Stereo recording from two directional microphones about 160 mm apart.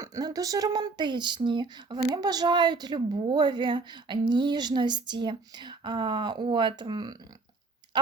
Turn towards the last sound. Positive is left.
turn(degrees=-25)  # may be behind; listen again after turning